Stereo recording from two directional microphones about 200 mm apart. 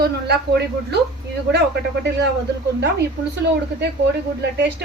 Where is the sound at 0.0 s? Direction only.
55° right (ahead or behind).